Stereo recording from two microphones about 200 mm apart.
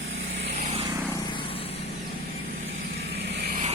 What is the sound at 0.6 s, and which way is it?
Vehicle, 30° right (ahead or behind).